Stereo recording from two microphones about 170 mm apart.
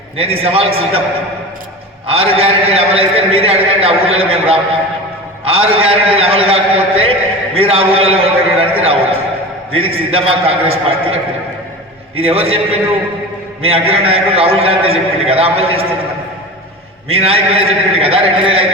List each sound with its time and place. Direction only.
0.2 s a man's voice: 35° right (ahead or behind)
2.0 s a man's voice: 35° right (ahead or behind)
17.1 s a man's voice: 35° right (ahead or behind)